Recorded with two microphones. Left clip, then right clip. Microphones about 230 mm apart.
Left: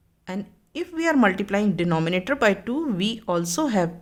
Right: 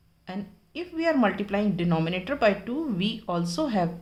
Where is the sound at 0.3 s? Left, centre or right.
Left.